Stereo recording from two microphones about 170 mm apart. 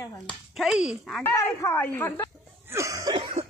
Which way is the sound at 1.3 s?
15° left (ahead or behind).